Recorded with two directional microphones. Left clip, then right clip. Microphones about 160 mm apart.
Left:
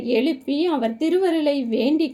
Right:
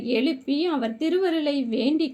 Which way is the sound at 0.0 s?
10° left (ahead or behind).